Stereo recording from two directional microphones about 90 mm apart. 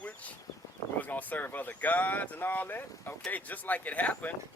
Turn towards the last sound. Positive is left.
turn(degrees=20)  # may be behind; listen again after turning